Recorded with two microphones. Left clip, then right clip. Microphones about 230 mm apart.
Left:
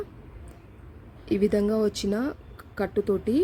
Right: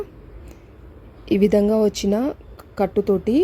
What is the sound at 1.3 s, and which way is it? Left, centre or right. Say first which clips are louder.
Speech: right 7 dB; centre.